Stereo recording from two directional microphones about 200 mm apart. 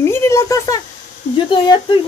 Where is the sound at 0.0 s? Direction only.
15° left (ahead or behind).